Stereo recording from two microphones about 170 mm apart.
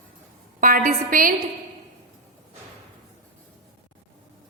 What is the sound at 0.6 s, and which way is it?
Speech, 55° right (ahead or behind).